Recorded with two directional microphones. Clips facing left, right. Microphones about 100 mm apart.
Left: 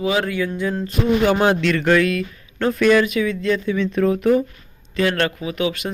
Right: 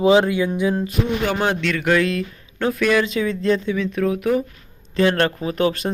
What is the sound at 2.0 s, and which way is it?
Speech, 30° right (ahead or behind).